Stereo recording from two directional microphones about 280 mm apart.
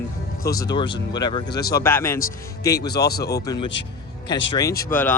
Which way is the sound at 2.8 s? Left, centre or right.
Left.